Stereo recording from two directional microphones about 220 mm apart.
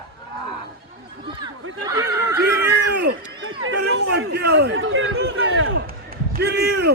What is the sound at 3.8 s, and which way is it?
Chatter, 50° right (ahead or behind).